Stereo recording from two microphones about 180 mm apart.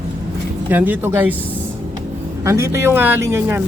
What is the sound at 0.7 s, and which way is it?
Speech, 10° right (ahead or behind).